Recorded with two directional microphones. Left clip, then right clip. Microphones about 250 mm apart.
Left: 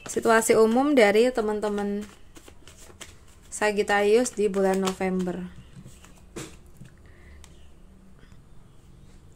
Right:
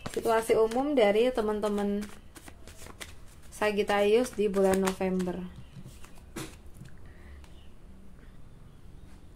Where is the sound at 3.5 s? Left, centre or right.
Centre.